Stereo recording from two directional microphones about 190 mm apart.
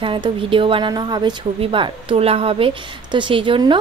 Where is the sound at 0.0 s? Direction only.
25° right (ahead or behind).